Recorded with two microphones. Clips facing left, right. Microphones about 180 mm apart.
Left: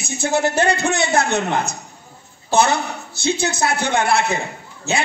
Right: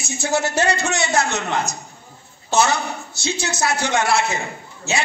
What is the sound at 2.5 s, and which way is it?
A woman's voice, 55° left (ahead or behind).